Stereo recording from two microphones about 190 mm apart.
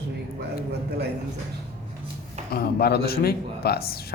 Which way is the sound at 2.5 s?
55° left (ahead or behind).